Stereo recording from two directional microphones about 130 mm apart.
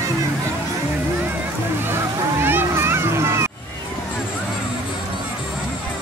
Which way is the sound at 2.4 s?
20° right (ahead or behind).